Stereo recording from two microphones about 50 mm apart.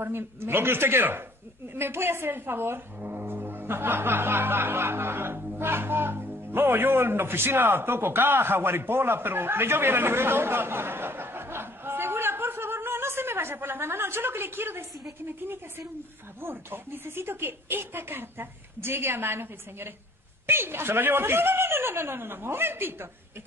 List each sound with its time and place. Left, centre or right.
0.0 s a man's voice: right
16.3 s speech: right